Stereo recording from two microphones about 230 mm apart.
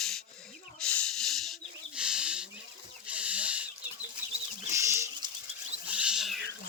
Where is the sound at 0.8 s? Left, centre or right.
Centre.